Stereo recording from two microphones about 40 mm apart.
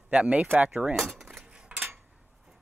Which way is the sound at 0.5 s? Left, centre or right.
Right.